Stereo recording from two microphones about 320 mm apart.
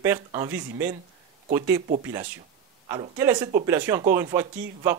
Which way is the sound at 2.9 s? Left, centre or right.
Centre.